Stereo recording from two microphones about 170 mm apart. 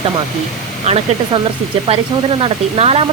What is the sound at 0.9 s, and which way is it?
Speech, 35° right (ahead or behind).